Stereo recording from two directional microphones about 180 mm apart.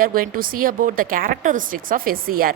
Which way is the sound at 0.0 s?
55° right (ahead or behind).